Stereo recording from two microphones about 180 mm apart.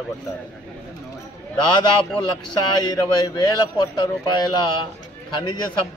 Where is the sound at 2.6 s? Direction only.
20° left (ahead or behind).